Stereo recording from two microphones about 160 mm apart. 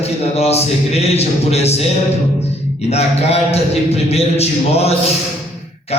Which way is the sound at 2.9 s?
40° left (ahead or behind).